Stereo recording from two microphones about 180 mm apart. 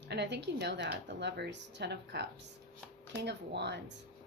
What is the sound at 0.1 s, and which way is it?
A woman's voice, 70° right (ahead or behind).